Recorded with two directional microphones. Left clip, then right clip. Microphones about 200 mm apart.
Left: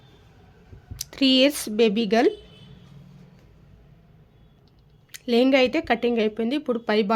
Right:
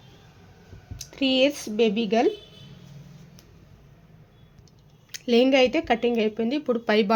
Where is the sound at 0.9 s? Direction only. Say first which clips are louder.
Left 3 dB; 20° left (ahead or behind).